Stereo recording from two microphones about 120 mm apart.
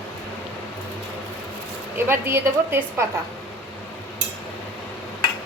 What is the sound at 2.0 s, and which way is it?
A woman's voice, 20° right (ahead or behind).